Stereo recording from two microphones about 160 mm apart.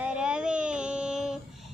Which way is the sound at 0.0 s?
5° right (ahead or behind).